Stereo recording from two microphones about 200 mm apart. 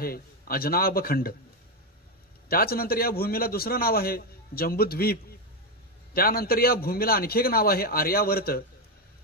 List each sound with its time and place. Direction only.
0.0 s a man's voice: 50° left (ahead or behind)
2.4 s a man's voice: 50° left (ahead or behind)